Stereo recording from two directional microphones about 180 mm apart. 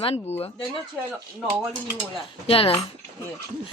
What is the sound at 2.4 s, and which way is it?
Speech, 30° left (ahead or behind).